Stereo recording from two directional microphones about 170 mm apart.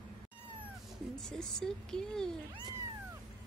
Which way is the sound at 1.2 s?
5° left (ahead or behind).